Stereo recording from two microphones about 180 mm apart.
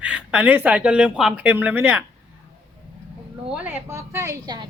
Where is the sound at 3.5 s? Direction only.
10° right (ahead or behind).